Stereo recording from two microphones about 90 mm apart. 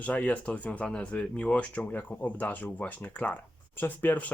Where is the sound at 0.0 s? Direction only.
15° left (ahead or behind).